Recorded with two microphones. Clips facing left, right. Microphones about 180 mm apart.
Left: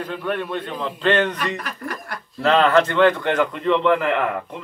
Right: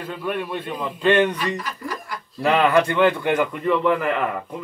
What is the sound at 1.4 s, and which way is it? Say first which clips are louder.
Speech: even; 60° left (ahead or behind).